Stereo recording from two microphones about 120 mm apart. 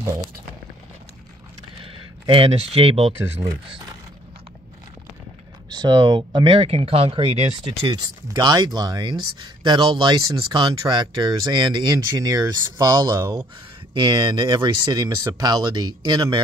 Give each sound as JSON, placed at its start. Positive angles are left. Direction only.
{"t": 2.2, "sound": "speech", "side_deg": -50}
{"t": 5.7, "sound": "speech", "side_deg": -35}
{"t": 7.9, "sound": "speech", "side_deg": -35}